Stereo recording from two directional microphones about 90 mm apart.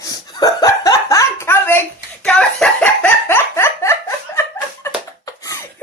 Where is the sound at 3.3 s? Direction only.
25° left (ahead or behind).